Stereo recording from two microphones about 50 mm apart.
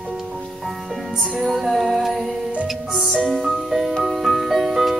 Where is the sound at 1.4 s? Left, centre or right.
Centre.